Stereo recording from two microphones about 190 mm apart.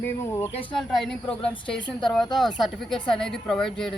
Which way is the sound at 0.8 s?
Centre (ahead or behind).